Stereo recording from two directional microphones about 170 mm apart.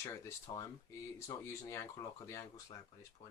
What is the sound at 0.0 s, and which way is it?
Speech, 15° left (ahead or behind).